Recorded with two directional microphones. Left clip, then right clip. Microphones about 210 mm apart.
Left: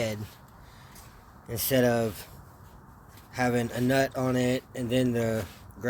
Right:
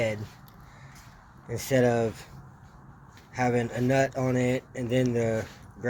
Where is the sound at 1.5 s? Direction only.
20° left (ahead or behind).